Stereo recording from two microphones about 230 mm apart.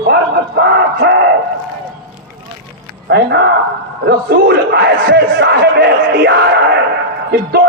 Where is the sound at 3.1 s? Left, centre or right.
Right.